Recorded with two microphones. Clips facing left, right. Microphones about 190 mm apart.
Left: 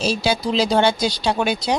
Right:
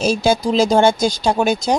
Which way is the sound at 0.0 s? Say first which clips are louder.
Right 4 dB; 50° right (ahead or behind).